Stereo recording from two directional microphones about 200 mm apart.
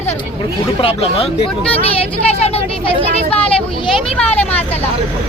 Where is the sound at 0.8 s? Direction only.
30° left (ahead or behind).